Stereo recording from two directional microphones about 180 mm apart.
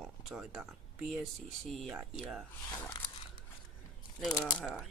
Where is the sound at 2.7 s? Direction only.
20° left (ahead or behind).